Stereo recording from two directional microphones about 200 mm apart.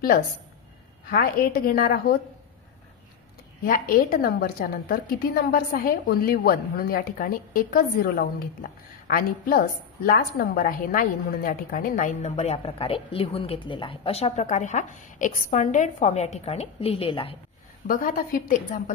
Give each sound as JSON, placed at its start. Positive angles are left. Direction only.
{"t": 1.1, "sound": "a woman's voice", "side_deg": 50}
{"t": 3.6, "sound": "a woman's voice", "side_deg": 45}
{"t": 17.8, "sound": "a woman's voice", "side_deg": 45}